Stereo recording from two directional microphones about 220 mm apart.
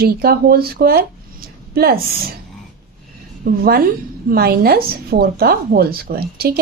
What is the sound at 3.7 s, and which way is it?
A woman's voice, 40° right (ahead or behind).